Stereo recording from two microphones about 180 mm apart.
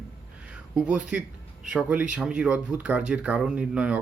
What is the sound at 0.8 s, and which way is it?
A man's voice, 5° right (ahead or behind).